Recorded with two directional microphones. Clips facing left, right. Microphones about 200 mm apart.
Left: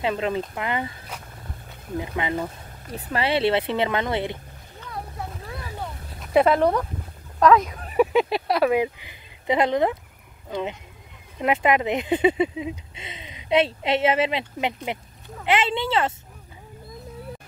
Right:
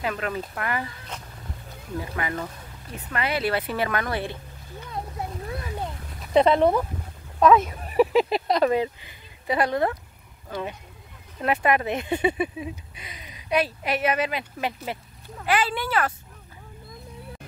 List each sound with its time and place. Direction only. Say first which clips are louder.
0.0 s speech: left 4 dB; 25° left (ahead or behind)
2.0 s speech: left 3 dB; 20° left (ahead or behind)
2.9 s speech: left 4 dB; 30° left (ahead or behind)
6.6 s speech: right 1 dB; 5° right (ahead or behind); by 16.1 s 25° left (ahead or behind)